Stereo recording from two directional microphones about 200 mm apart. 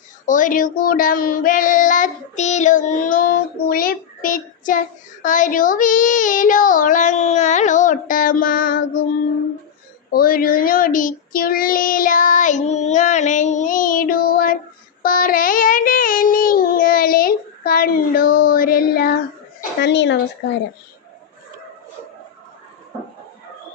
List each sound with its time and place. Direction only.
0.3 s child singing: 40° left (ahead or behind)
10.1 s child singing: 45° left (ahead or behind)
19.8 s speech: 65° left (ahead or behind)